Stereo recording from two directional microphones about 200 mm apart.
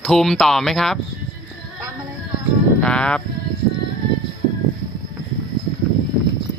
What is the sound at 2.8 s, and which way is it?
Music, 5° left (ahead or behind).